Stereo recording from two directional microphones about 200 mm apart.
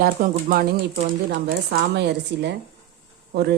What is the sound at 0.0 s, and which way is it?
Speech, 45° right (ahead or behind).